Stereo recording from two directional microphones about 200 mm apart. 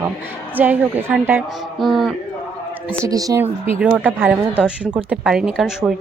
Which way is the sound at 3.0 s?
15° right (ahead or behind).